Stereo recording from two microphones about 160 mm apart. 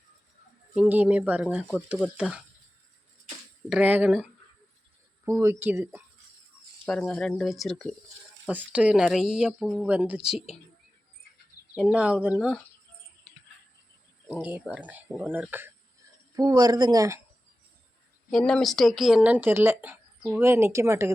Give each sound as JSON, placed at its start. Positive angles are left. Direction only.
{"t": 0.7, "sound": "speech", "side_deg": -10}
{"t": 3.7, "sound": "speech", "side_deg": -10}
{"t": 6.8, "sound": "speech", "side_deg": 5}
{"t": 11.8, "sound": "speech", "side_deg": -5}
{"t": 14.7, "sound": "speech", "side_deg": -10}
{"t": 16.3, "sound": "speech", "side_deg": -20}
{"t": 18.3, "sound": "speech", "side_deg": 0}